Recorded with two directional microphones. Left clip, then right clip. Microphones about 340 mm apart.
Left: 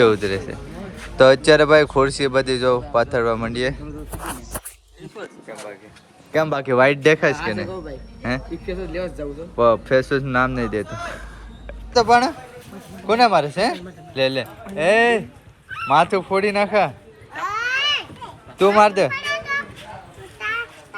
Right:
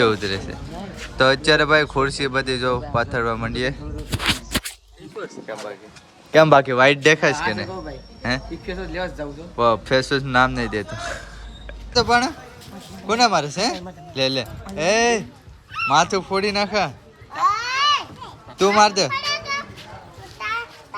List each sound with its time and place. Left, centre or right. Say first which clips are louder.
0.0 s a man's voice: left 3 dB; centre
6.3 s speech: right 8 dB; right
6.7 s a man's voice: even; centre
17.3 s a sound: right 3 dB; right
18.6 s speech: left 2 dB; centre
19.1 s children playing: left 1 dB; right